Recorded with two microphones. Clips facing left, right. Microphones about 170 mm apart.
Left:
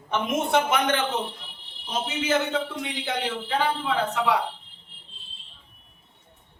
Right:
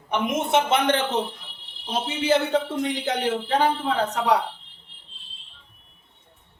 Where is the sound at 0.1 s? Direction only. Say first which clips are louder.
Right 1 dB; 20° right (ahead or behind); by 4.4 s 40° right (ahead or behind).